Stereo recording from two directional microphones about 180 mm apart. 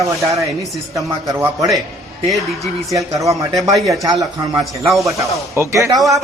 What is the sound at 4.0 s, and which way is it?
Speech, 20° right (ahead or behind).